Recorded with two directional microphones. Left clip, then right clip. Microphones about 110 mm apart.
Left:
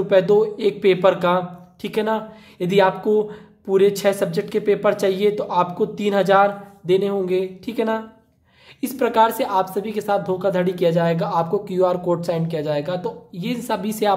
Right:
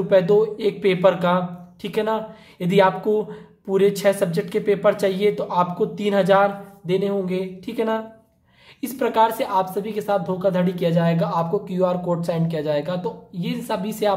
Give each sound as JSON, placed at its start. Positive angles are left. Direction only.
{"t": 0.1, "sound": "a woman's voice", "side_deg": 25}